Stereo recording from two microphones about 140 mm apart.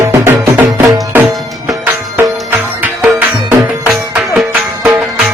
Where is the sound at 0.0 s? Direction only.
20° right (ahead or behind).